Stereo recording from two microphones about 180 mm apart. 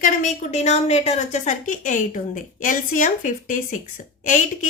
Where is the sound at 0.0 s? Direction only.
45° left (ahead or behind).